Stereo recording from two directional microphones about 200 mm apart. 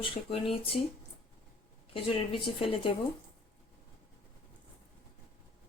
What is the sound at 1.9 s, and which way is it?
Speech, 25° left (ahead or behind).